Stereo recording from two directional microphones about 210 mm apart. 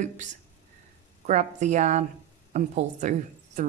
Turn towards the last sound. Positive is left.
turn(degrees=-35)  # may be behind; listen again after turning